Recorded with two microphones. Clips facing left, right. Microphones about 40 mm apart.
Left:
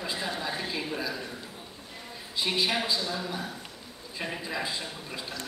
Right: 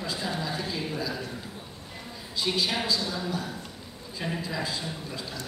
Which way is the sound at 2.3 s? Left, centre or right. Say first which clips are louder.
Even; left.